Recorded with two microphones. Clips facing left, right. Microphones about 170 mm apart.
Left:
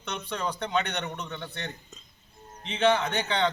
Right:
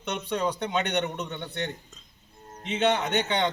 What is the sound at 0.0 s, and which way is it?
A man's voice, 20° right (ahead or behind).